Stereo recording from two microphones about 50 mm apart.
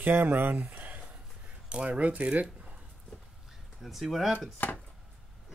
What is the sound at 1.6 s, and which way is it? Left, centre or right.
Speech, right.